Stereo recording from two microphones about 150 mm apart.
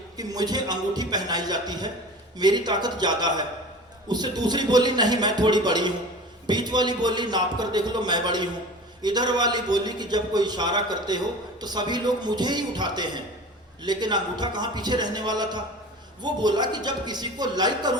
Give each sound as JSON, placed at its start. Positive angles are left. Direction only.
{"t": 0.2, "sound": "a man's voice", "side_deg": -25}